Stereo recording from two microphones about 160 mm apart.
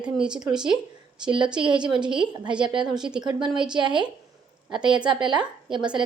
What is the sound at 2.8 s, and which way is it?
Speech, 5° right (ahead or behind).